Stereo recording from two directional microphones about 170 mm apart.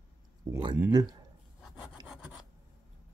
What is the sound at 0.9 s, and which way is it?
Speech, 25° right (ahead or behind).